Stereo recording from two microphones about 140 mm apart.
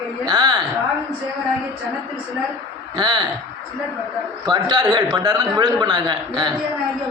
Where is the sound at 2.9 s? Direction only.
30° right (ahead or behind).